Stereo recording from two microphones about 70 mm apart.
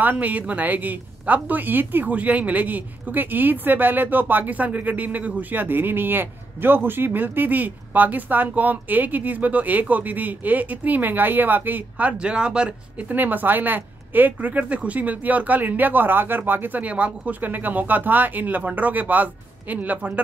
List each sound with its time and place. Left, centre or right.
0.0 s speech: right
13.1 s speech: right